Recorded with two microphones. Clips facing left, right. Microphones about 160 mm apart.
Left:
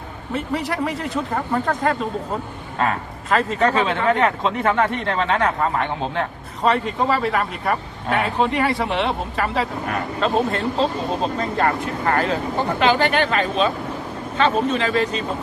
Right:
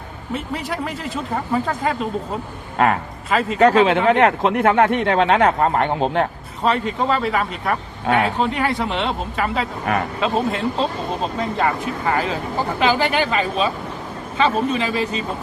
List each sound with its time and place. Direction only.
0.3 s speech: centre (ahead or behind)
2.7 s speech: 65° right (ahead or behind)
3.2 s speech: 5° right (ahead or behind)
3.6 s speech: 70° right (ahead or behind)
6.7 s speech: centre (ahead or behind)